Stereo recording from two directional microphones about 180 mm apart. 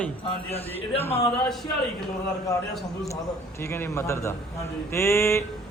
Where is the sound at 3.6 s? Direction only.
15° left (ahead or behind).